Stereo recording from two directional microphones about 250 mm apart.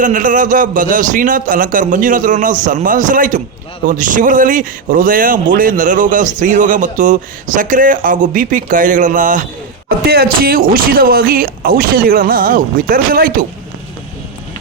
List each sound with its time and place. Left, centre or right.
0.0 s speech: right